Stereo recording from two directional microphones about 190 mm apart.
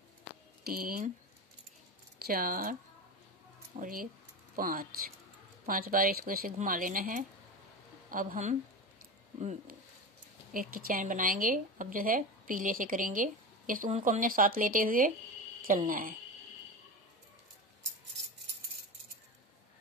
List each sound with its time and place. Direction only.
0.7 s a woman's voice: 50° right (ahead or behind)
2.2 s a woman's voice: 50° right (ahead or behind)
10.5 s a woman's voice: 50° right (ahead or behind)